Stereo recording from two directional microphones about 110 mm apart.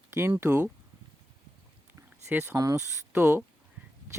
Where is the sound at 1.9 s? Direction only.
20° right (ahead or behind).